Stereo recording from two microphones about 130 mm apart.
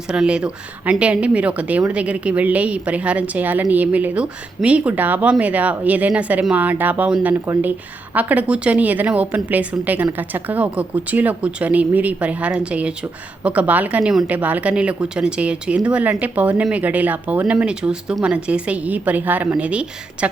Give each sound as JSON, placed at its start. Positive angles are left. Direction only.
{"t": 0.1, "sound": "speech", "side_deg": -5}